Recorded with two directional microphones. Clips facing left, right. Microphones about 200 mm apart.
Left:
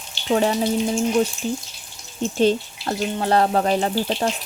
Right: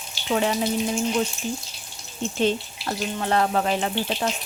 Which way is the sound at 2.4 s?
35° left (ahead or behind).